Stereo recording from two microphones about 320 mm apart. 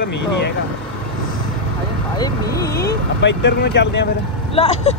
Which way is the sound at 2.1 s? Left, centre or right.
Centre.